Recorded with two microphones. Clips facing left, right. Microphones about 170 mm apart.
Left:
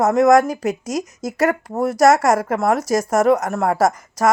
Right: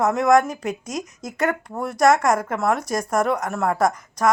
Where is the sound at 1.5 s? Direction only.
40° left (ahead or behind).